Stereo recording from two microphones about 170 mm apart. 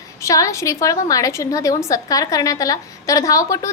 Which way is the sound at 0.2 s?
20° left (ahead or behind).